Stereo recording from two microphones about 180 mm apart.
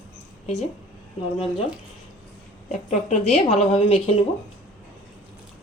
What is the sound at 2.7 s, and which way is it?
A woman's voice, 35° left (ahead or behind).